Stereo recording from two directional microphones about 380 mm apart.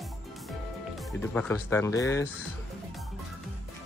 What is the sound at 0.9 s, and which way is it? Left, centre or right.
Speech, centre.